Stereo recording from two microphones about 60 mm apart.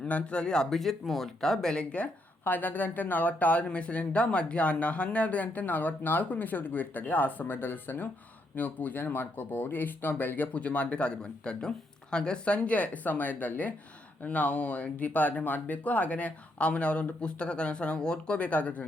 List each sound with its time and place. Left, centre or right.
0.0 s speech: centre
2.4 s speech: left